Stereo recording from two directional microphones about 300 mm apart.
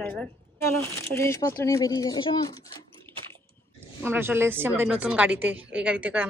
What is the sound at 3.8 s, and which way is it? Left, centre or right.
A woman's voice, centre.